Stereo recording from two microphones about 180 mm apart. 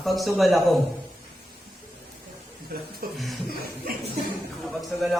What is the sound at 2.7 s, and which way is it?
Speech, 55° right (ahead or behind).